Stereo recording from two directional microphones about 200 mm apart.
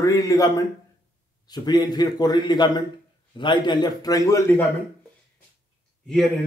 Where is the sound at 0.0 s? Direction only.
15° left (ahead or behind).